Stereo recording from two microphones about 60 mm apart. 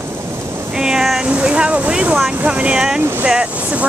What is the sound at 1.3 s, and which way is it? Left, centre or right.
Vehicle, centre.